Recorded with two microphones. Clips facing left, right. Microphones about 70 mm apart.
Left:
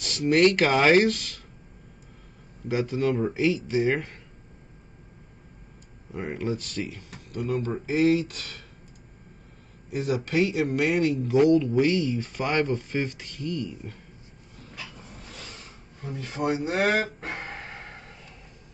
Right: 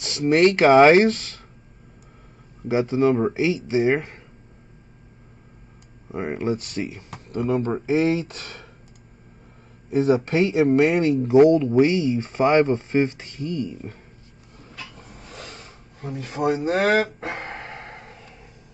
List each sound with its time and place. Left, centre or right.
0.0 s speech: right
2.7 s speech: right
3.3 s speech: centre
6.1 s speech: right
9.8 s speech: right
11.7 s speech: centre
16.4 s speech: right
16.8 s speech: right
17.5 s a sound: right